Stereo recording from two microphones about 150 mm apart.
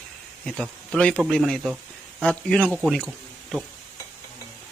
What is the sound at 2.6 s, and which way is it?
Speech, 5° right (ahead or behind).